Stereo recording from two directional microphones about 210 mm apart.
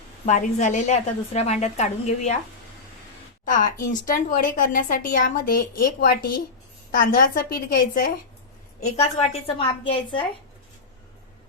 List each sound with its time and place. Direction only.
0.3 s a woman's voice: 35° left (ahead or behind)
3.4 s a woman's voice: 40° left (ahead or behind)
9.1 s a woman's voice: 30° left (ahead or behind)